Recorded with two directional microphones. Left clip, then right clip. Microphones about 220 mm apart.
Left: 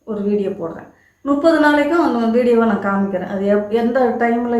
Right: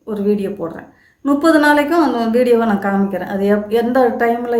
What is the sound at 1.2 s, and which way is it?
A woman's voice, 50° right (ahead or behind).